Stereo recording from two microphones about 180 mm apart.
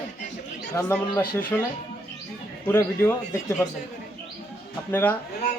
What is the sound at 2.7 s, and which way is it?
Speech, 15° left (ahead or behind).